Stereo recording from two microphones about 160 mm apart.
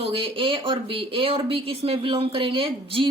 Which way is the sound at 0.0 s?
35° right (ahead or behind).